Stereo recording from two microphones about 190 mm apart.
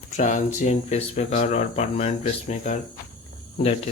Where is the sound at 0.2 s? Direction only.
40° left (ahead or behind).